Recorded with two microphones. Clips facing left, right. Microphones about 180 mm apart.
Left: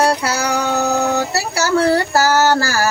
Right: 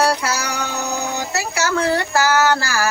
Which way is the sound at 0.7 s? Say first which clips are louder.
Left 9 dB; 60° left (ahead or behind).